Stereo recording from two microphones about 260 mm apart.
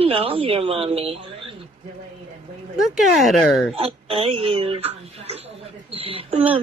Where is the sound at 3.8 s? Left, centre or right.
Right.